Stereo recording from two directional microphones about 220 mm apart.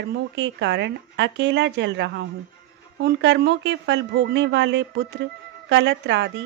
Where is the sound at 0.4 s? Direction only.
55° right (ahead or behind).